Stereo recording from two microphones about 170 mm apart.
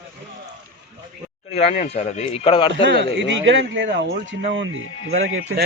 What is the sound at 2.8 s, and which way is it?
Speech, 90° right.